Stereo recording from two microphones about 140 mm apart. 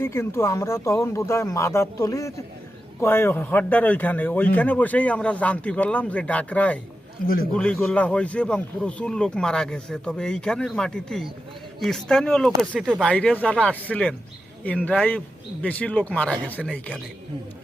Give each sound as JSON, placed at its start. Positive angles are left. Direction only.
{"t": 0.0, "sound": "a man's voice", "side_deg": 20}
{"t": 7.2, "sound": "speech", "side_deg": 90}
{"t": 7.5, "sound": "a man's voice", "side_deg": 5}